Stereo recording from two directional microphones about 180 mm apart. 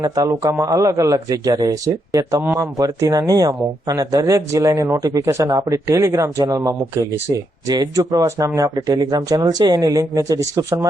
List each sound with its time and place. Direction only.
0.0 s speech: 20° right (ahead or behind)